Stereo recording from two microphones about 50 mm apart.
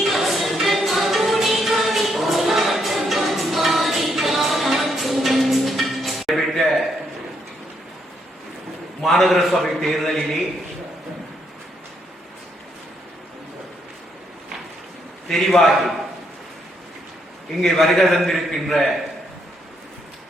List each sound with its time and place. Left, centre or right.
0.0 s music: centre
9.0 s a man's voice: centre
15.3 s a man's voice: centre
17.6 s a man's voice: centre